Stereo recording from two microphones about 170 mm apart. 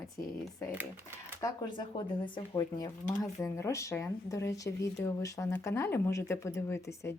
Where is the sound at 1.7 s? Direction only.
30° left (ahead or behind).